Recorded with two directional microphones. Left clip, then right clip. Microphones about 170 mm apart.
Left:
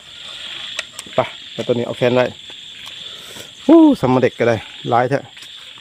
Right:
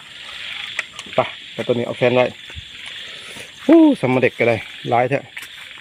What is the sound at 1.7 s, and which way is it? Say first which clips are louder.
Hoot: left 1 dB; 15° left (ahead or behind).